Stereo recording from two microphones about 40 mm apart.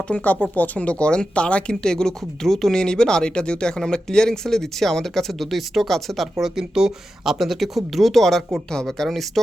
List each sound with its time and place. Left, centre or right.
0.1 s speech: left
0.5 s speech: left
1.8 s speech: centre
2.7 s speech: centre
6.4 s speech: centre